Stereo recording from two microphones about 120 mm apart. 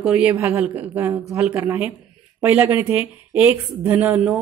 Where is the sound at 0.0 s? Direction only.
10° right (ahead or behind).